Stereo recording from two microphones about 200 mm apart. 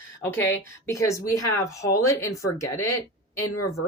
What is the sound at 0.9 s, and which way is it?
Speech, 15° left (ahead or behind).